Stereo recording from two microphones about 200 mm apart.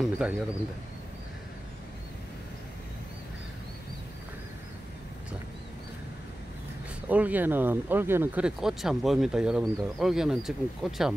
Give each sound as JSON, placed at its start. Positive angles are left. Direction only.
{"t": 0.0, "sound": "speech", "side_deg": -5}
{"t": 7.1, "sound": "speech", "side_deg": -10}